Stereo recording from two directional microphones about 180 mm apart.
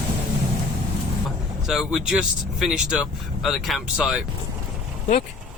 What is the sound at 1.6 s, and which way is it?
Speech, centre (ahead or behind).